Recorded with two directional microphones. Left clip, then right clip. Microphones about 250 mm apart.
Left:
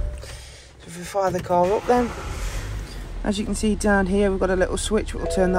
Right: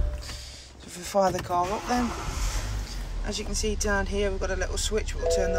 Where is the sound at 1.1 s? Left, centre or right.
Centre.